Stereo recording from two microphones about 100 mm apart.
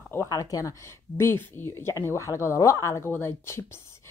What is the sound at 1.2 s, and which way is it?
Speech, 25° left (ahead or behind).